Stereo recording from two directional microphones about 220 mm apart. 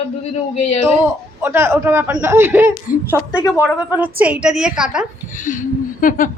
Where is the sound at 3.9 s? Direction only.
5° right (ahead or behind).